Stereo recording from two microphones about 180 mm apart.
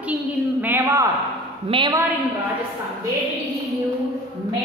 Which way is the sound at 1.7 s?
25° right (ahead or behind).